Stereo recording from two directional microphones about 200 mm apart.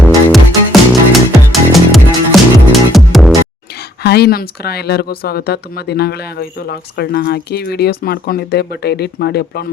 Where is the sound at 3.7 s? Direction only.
55° left (ahead or behind).